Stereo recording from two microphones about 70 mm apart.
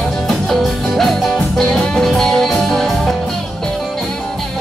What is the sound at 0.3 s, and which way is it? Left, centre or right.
Music, centre.